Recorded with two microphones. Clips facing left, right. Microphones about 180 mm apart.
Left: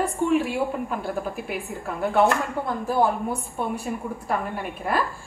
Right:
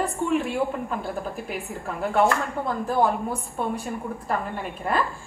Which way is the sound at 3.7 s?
5° left (ahead or behind).